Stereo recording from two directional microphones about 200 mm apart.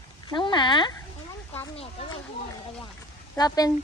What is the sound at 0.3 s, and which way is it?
A woman's voice, 25° left (ahead or behind).